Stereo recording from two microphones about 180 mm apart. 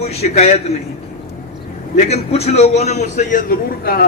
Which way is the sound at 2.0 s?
35° left (ahead or behind).